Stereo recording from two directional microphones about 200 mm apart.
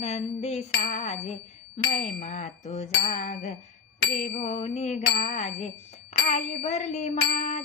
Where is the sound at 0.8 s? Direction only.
30° left (ahead or behind).